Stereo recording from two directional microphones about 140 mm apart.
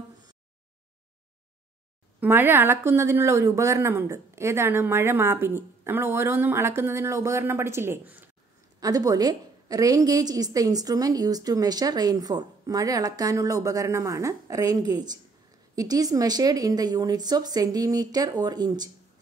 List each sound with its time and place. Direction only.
2.1 s a woman's voice: 15° right (ahead or behind)
8.7 s a woman's voice: 25° right (ahead or behind)